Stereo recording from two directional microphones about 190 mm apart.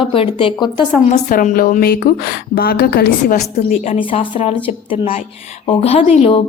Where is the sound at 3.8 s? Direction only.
30° left (ahead or behind).